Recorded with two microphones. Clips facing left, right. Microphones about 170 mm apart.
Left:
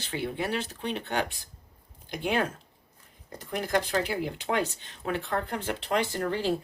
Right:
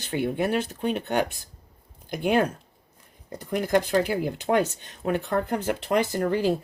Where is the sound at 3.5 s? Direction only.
50° right (ahead or behind).